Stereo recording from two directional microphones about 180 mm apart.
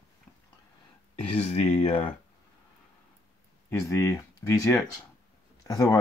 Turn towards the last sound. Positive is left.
turn(degrees=20)  # may be behind; listen again after turning